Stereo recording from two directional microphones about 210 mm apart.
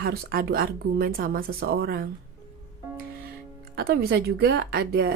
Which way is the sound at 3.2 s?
45° right (ahead or behind).